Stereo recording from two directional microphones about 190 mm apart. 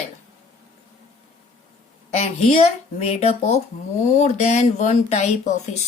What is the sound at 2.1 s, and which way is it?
A woman's voice, 35° left (ahead or behind).